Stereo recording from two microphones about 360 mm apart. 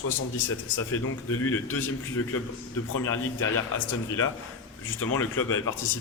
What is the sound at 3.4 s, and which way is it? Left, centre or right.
Speech, left.